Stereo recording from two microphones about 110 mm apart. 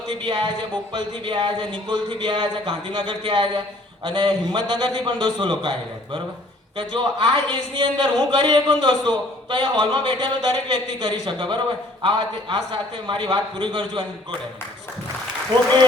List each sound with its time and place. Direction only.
0.1 s a man's voice: 45° right (ahead or behind)
6.7 s a man's voice: 45° right (ahead or behind)